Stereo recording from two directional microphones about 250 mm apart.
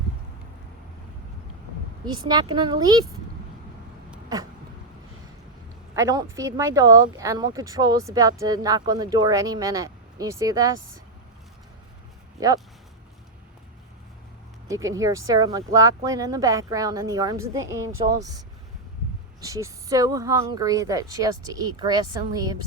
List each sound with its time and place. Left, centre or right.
2.0 s speech: centre
5.9 s speech: centre
14.7 s speech: centre
19.4 s speech: centre